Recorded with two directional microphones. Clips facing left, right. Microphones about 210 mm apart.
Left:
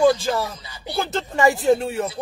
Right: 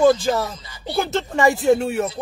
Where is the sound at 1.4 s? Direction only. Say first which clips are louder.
Right 1 dB; centre (ahead or behind).